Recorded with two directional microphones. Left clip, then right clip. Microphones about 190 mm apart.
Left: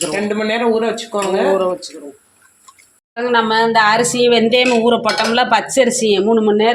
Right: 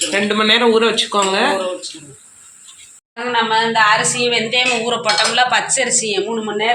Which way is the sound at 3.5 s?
60° left (ahead or behind).